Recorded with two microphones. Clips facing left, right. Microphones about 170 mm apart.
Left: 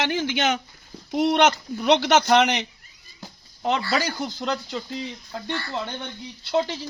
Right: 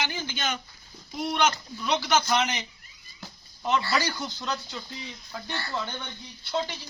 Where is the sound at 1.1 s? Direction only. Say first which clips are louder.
Left 7 dB; 70° left (ahead or behind).